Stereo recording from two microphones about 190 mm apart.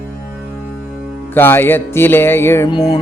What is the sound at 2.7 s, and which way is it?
Music, 25° left (ahead or behind).